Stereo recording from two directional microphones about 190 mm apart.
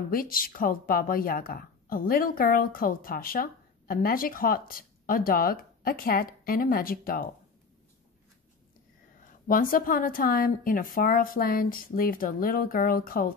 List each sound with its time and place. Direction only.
0.1 s a woman's voice: 50° left (ahead or behind)
9.5 s a woman's voice: 45° left (ahead or behind)